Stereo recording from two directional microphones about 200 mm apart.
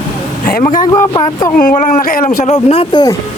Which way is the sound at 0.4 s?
45° left (ahead or behind).